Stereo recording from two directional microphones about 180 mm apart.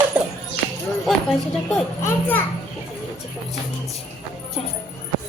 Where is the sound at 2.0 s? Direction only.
15° left (ahead or behind).